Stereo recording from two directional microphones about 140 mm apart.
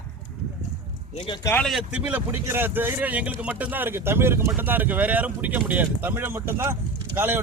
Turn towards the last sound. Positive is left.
turn(degrees=-15)  # may be behind; listen again after turning